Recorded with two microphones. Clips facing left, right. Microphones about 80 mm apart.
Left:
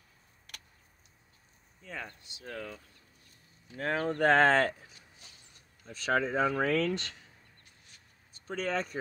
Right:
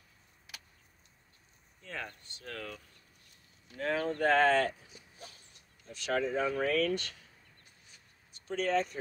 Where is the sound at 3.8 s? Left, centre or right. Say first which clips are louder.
Left 1 dB; left.